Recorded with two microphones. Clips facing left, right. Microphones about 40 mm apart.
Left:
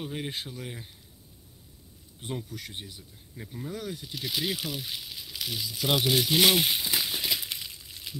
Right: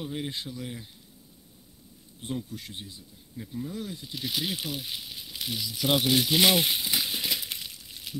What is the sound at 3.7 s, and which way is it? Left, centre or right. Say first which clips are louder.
Speech: left 1 dB; left.